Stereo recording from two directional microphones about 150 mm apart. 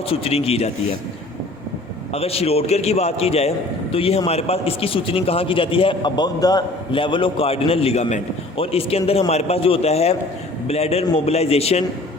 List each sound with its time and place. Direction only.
0.1 s a man's voice: 40° left (ahead or behind)
2.1 s a man's voice: 40° left (ahead or behind)